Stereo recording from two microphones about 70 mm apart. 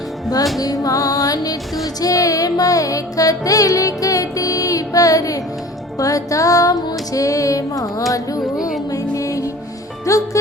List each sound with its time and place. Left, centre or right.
0.6 s music: left